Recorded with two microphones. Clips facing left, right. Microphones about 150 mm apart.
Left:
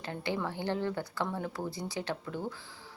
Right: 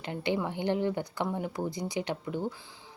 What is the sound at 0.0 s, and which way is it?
Speech, 20° right (ahead or behind).